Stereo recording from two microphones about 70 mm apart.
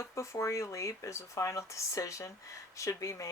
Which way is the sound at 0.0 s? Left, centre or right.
Left.